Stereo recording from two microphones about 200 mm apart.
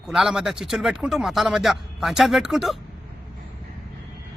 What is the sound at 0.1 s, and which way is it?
Speech, 5° right (ahead or behind).